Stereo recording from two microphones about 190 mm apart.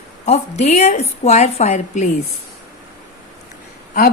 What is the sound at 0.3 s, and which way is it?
A woman's voice, 35° left (ahead or behind).